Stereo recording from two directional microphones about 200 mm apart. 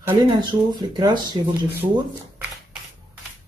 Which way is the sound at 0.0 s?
20° right (ahead or behind).